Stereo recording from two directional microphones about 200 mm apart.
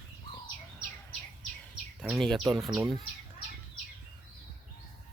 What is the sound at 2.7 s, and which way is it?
Speech, 20° right (ahead or behind).